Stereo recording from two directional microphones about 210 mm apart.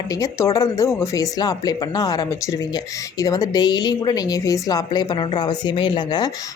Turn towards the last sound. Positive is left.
turn(degrees=20)  # may be behind; listen again after turning